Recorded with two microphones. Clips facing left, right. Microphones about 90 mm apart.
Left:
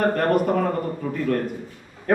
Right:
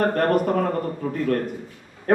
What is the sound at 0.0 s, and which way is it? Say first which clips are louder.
Speech: even; 45° right (ahead or behind).